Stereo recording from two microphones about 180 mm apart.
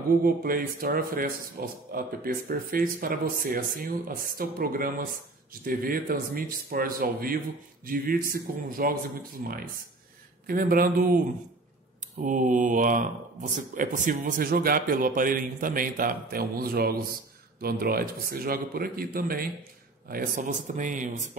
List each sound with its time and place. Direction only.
0.2 s a man's voice: 55° right (ahead or behind)